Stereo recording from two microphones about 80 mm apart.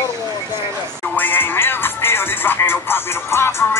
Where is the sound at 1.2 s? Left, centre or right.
Left.